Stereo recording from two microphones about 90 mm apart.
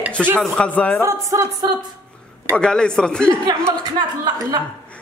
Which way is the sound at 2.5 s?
10° left (ahead or behind).